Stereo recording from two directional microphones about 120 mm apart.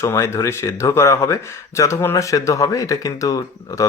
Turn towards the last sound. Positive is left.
turn(degrees=30)  # may be behind; listen again after turning